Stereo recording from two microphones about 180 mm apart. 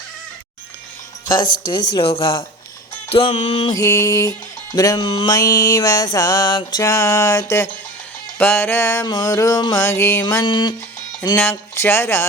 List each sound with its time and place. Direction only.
1.3 s music: 25° left (ahead or behind)
3.8 s music: 15° left (ahead or behind)
10.4 s music: 25° left (ahead or behind)
11.2 s music: 15° left (ahead or behind)